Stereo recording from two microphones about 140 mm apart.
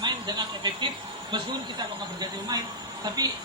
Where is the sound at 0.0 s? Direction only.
30° right (ahead or behind).